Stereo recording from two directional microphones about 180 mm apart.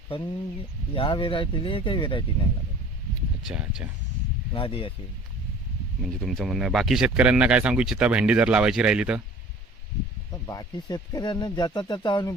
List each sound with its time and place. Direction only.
0.1 s speech: 30° left (ahead or behind)
3.4 s speech: 5° right (ahead or behind)
4.6 s speech: 30° left (ahead or behind)
6.0 s speech: centre (ahead or behind)
10.3 s speech: 20° left (ahead or behind)